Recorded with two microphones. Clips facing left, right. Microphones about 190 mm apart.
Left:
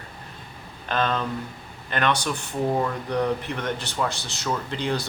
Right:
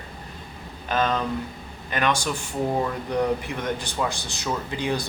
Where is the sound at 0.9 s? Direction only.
10° right (ahead or behind).